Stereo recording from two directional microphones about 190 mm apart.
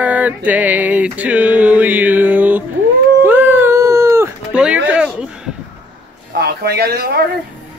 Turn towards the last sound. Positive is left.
turn(degrees=-55)  # may be behind; listen again after turning